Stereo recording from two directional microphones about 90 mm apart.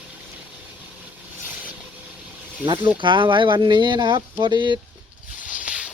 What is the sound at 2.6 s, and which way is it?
Speech, 65° right (ahead or behind).